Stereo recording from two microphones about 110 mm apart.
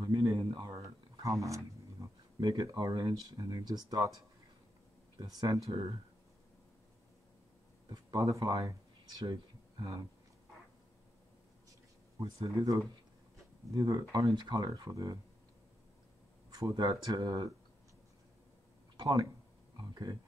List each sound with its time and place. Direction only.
0.0 s a sound: 35° right (ahead or behind)
1.2 s speech: 30° right (ahead or behind)
5.1 s speech: 35° right (ahead or behind)
7.9 s speech: 30° right (ahead or behind)
12.5 s speech: 30° right (ahead or behind)
16.4 s speech: 35° right (ahead or behind)
19.8 s speech: 35° right (ahead or behind)